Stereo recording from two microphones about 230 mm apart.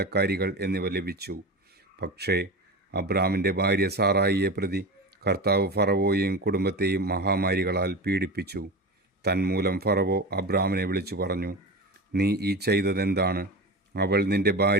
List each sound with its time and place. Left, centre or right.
0.0 s speech: right